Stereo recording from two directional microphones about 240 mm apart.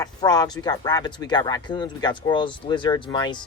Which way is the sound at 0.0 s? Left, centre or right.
Centre.